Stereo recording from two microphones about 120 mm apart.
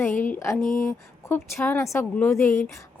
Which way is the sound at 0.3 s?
25° left (ahead or behind).